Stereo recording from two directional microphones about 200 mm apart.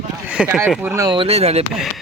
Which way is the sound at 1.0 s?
25° right (ahead or behind).